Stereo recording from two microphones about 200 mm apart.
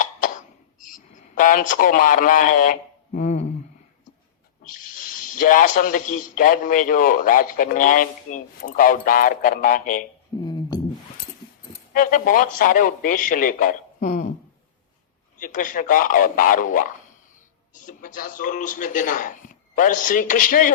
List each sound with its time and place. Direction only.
1.1 s speech: 40° left (ahead or behind)
4.9 s a man's voice: 45° left (ahead or behind)
10.4 s a sound: 20° left (ahead or behind)
11.7 s speech: 40° left (ahead or behind)
15.4 s speech: 40° left (ahead or behind)